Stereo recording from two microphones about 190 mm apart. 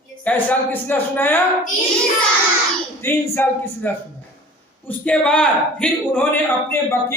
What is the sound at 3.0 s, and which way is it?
Speech, 15° left (ahead or behind).